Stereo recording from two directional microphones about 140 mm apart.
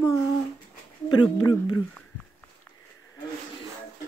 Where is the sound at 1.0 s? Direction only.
35° left (ahead or behind).